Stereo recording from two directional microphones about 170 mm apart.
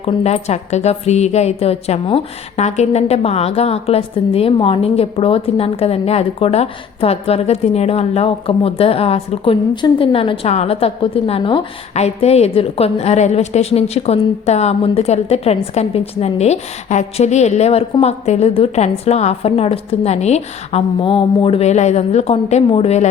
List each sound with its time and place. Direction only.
0.0 s a woman's voice: 35° left (ahead or behind)